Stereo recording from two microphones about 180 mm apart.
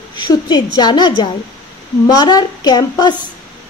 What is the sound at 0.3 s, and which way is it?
A woman's voice, 25° left (ahead or behind).